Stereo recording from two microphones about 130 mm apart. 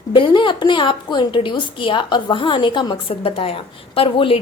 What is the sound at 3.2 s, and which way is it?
A woman's voice, 50° left (ahead or behind).